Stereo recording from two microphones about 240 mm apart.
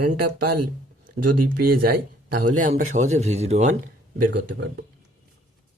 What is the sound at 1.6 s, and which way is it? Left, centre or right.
Speech, right.